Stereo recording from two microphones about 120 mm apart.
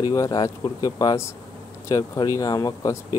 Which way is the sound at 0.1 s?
30° left (ahead or behind).